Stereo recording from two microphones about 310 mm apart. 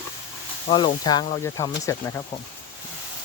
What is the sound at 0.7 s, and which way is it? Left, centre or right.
Speech, centre.